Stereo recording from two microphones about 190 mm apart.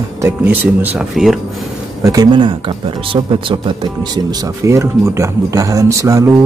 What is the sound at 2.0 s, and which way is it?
Speech, 20° right (ahead or behind).